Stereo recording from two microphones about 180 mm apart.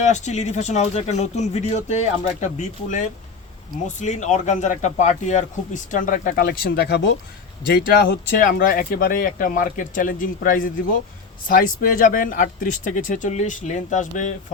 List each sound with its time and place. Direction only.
0.0 s speech: 40° left (ahead or behind); by 7.2 s 75° left (ahead or behind)
7.7 s speech: 60° left (ahead or behind); by 14.3 s 45° left (ahead or behind)